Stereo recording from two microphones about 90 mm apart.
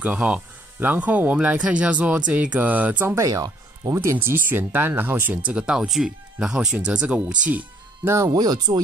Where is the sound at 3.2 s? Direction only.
40° right (ahead or behind); by 8.1 s 15° right (ahead or behind).